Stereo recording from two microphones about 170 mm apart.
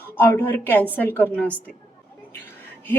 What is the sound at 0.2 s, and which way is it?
A woman's voice, 10° left (ahead or behind).